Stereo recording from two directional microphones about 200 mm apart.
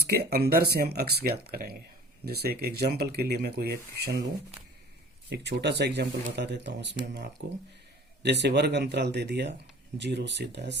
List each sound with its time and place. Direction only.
0.0 s speech: 50° right (ahead or behind)
5.3 s speech: 55° right (ahead or behind)